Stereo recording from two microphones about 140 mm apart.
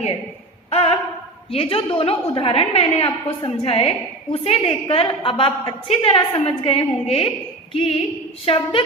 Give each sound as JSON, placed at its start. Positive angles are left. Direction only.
{"t": 0.7, "sound": "a woman's voice", "side_deg": 45}